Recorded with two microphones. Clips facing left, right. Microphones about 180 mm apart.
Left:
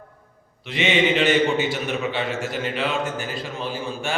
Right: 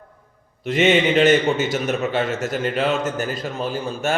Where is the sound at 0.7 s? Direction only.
45° right (ahead or behind).